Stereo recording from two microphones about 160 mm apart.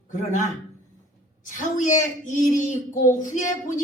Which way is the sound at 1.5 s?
50° left (ahead or behind).